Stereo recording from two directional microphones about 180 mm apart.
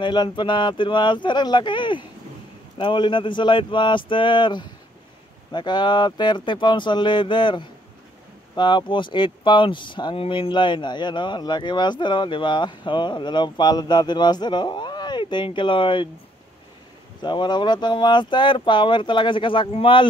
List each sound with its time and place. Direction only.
0.0 s speech: 25° left (ahead or behind)
17.2 s speech: 25° left (ahead or behind)